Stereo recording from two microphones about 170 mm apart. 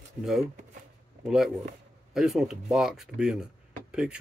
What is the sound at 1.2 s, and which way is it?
Speech, centre (ahead or behind).